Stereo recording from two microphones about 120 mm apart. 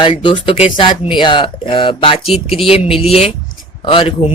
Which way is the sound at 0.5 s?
60° left (ahead or behind).